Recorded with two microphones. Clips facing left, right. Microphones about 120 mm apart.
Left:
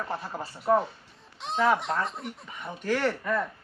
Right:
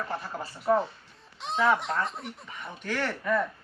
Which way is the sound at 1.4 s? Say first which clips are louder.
Left 1 dB; centre (ahead or behind).